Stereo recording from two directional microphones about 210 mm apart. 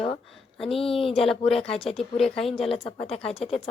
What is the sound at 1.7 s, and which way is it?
Speech, 25° left (ahead or behind).